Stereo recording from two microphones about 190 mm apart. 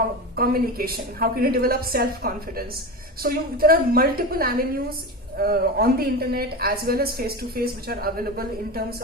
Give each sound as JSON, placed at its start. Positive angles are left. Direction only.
{"t": 0.3, "sound": "a woman's voice", "side_deg": -50}